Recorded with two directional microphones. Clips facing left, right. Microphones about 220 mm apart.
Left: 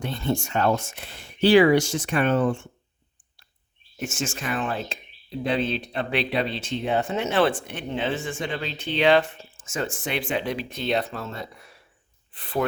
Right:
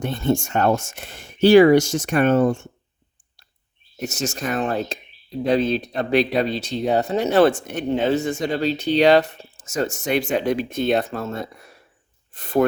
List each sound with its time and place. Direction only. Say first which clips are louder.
0.0 s speech: right 5 dB; 45° right (ahead or behind)
4.0 s speech: right 4 dB; 40° right (ahead or behind)